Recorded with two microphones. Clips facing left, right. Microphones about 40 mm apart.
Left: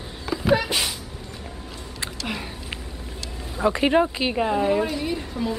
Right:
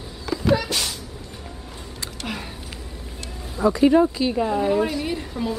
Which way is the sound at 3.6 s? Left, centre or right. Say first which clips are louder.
Right 3 dB; left.